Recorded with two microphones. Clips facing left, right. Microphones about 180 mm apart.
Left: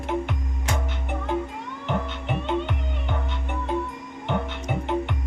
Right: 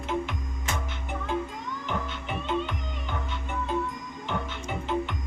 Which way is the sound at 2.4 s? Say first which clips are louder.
Left 2 dB; 65° left (ahead or behind).